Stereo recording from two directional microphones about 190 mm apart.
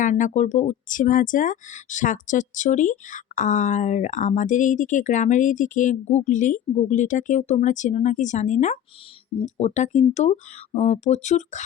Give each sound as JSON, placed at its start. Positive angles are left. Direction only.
{"t": 0.0, "sound": "speech", "side_deg": 40}